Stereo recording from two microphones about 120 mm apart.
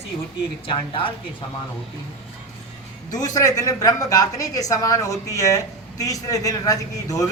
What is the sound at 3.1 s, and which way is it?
A woman's voice, 35° left (ahead or behind).